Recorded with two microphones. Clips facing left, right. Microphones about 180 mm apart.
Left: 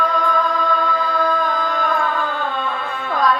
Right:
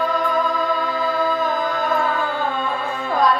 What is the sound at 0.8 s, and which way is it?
Music, 20° right (ahead or behind).